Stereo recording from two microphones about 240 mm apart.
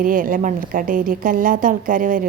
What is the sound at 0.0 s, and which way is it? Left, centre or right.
Speech, right.